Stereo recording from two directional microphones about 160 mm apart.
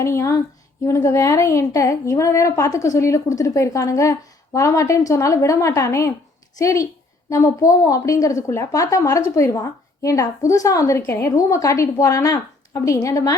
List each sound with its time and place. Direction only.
0.0 s a woman's voice: 20° left (ahead or behind)